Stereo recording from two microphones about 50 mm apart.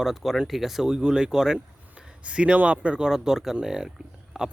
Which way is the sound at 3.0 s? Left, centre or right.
Centre.